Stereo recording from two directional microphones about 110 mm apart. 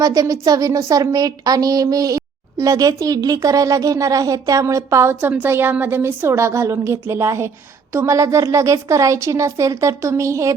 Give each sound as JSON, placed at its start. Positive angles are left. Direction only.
{"t": 0.0, "sound": "a woman's voice", "side_deg": -30}